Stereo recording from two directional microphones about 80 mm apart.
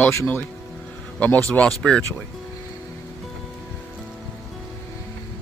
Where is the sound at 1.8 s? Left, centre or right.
Centre.